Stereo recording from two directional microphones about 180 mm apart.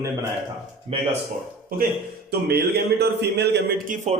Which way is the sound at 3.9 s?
45° right (ahead or behind).